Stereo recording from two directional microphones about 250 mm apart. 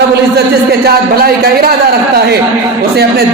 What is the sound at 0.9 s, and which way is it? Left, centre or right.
Speech, right.